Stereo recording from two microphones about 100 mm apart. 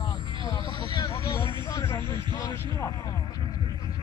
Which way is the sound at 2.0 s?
50° right (ahead or behind).